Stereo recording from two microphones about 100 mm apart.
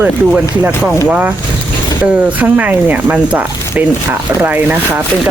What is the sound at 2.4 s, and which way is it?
Speech, 15° right (ahead or behind).